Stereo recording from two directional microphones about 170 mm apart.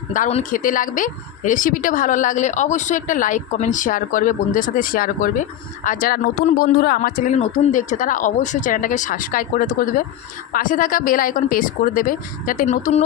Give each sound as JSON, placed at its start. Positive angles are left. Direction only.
{"t": 0.1, "sound": "a woman's voice", "side_deg": 45}
{"t": 7.3, "sound": "a woman's voice", "side_deg": 45}